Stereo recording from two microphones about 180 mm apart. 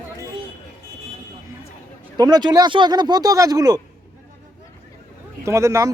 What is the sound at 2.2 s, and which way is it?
Speech, 20° right (ahead or behind).